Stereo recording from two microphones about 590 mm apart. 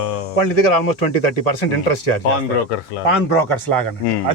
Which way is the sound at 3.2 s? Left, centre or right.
Left.